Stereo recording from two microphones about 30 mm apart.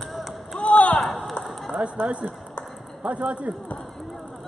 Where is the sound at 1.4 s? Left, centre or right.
Centre.